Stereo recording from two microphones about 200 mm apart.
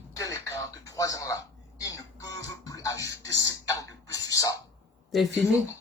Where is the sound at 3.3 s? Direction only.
65° right (ahead or behind).